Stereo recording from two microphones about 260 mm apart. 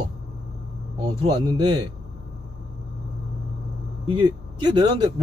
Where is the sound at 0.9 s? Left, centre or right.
Centre.